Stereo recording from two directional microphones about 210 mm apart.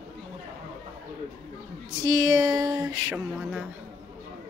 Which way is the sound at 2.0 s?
20° right (ahead or behind).